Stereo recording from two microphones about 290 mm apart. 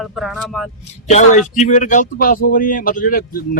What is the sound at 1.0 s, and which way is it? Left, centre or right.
Speech, left.